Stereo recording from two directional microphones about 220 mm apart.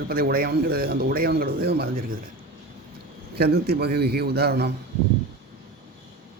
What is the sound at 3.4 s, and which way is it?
A man's voice, 45° right (ahead or behind).